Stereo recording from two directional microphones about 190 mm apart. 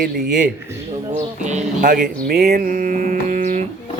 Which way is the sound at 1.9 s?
55° right (ahead or behind).